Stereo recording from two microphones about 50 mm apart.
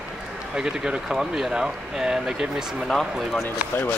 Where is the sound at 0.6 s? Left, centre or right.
Centre.